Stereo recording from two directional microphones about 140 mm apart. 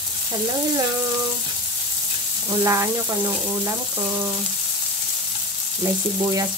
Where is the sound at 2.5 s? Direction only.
20° right (ahead or behind).